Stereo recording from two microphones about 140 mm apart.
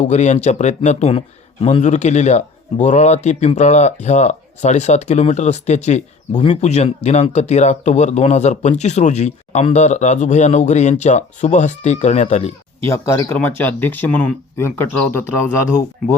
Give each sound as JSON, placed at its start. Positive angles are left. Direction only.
{"t": 0.0, "sound": "speech", "side_deg": 55}
{"t": 12.8, "sound": "speech", "side_deg": 20}